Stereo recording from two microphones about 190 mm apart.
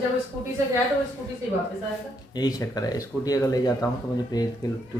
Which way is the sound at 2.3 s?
20° left (ahead or behind).